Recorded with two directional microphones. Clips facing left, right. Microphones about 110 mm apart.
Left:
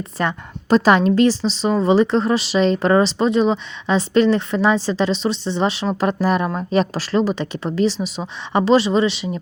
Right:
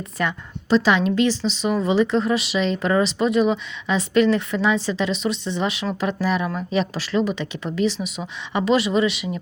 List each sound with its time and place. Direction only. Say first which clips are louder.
0.2 s speech: left 3 dB; 35° left (ahead or behind)
0.7 s speech: left 4 dB; 45° left (ahead or behind)